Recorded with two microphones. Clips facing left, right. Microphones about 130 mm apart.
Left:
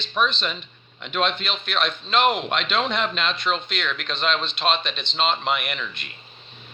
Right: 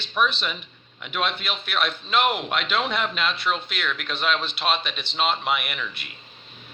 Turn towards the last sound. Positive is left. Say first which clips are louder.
# left 1 dB
turn(degrees=-5)  # may be behind; listen again after turning